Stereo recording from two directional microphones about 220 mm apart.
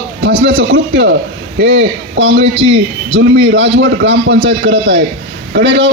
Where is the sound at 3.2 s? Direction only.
50° right (ahead or behind).